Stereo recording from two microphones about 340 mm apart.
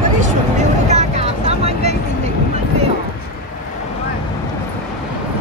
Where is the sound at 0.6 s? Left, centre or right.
Centre.